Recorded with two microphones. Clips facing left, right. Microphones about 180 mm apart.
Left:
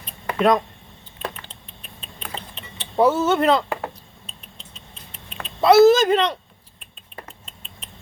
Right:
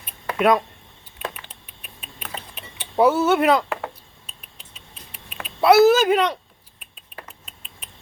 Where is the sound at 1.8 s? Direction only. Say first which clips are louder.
Left 1 dB; 10° right (ahead or behind).